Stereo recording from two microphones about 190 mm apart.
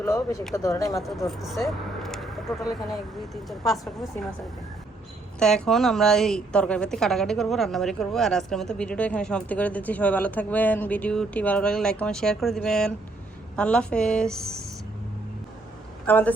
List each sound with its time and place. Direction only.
0.0 s speech: 15° left (ahead or behind)
1.3 s speech: centre (ahead or behind)
5.4 s a woman's voice: 5° left (ahead or behind)
16.0 s speech: 10° left (ahead or behind)